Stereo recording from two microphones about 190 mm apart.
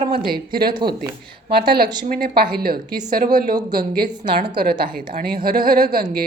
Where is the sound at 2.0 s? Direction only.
40° right (ahead or behind).